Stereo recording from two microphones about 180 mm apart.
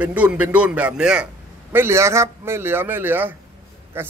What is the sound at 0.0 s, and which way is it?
A man's voice, 5° right (ahead or behind).